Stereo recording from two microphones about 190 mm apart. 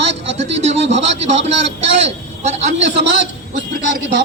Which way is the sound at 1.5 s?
35° right (ahead or behind).